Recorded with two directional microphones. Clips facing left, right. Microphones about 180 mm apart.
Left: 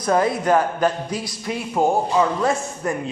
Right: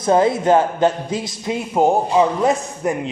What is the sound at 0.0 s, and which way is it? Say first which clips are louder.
A man's voice: right 4 dB; 25° right (ahead or behind).